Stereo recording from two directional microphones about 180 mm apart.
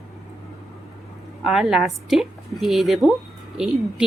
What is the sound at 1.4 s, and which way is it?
A woman's voice, 5° right (ahead or behind).